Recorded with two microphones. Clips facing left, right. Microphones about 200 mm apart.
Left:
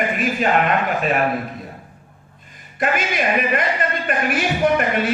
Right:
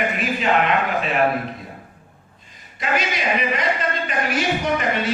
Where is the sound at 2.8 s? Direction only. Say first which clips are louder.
Left 3 dB; 50° left (ahead or behind).